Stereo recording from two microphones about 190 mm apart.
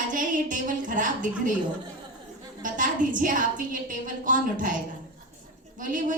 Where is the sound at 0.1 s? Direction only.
45° right (ahead or behind).